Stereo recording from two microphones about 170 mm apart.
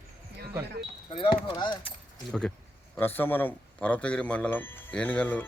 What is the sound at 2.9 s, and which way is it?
Speech, 10° left (ahead or behind).